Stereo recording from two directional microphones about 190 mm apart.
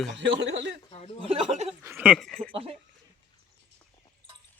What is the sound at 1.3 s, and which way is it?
Speech, 35° right (ahead or behind).